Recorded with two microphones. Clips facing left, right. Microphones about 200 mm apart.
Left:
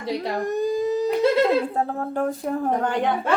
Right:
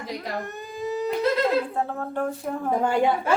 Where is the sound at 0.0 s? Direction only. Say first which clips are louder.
Left 6 dB; 35° left (ahead or behind).